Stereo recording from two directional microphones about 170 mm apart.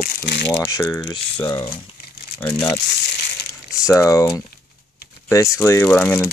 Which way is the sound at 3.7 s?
15° left (ahead or behind).